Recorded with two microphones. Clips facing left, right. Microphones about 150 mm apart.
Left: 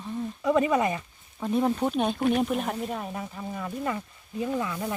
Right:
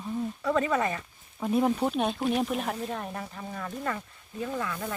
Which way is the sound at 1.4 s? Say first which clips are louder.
Even; 5° right (ahead or behind).